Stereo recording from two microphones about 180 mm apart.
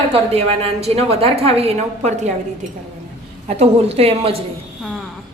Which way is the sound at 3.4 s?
35° right (ahead or behind).